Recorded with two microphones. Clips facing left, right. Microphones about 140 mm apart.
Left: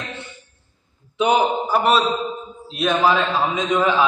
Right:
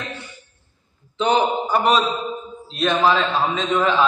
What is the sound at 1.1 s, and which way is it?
A man's voice, 10° left (ahead or behind).